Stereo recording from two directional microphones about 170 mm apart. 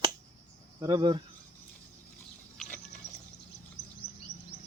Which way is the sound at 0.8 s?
30° right (ahead or behind).